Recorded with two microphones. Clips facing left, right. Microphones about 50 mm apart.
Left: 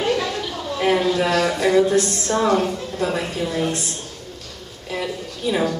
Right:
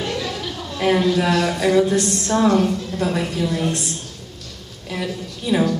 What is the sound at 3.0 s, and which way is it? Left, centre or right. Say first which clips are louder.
Speech: even; centre.